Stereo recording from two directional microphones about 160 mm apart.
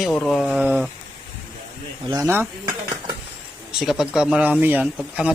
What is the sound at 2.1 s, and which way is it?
Speech, 20° right (ahead or behind).